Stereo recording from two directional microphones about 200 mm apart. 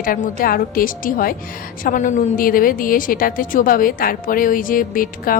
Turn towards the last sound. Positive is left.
turn(degrees=45)  # may be behind; listen again after turning